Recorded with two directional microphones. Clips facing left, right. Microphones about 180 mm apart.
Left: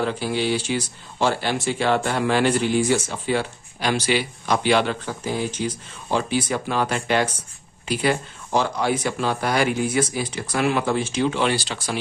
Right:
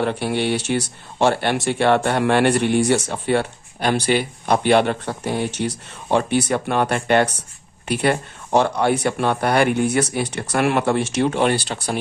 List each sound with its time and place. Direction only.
0.0 s speech: 65° right (ahead or behind)